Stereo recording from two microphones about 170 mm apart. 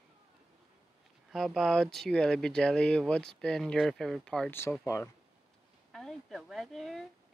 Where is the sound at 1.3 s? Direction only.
Centre (ahead or behind).